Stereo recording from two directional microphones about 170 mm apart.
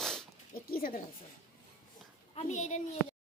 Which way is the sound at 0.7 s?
55° left (ahead or behind).